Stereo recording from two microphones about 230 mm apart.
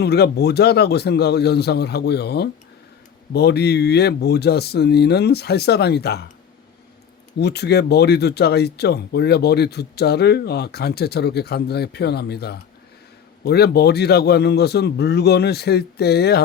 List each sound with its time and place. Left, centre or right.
0.0 s speech: left
7.3 s speech: left